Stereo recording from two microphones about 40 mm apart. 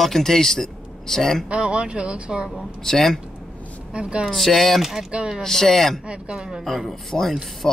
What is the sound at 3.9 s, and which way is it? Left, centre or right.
Speech, right.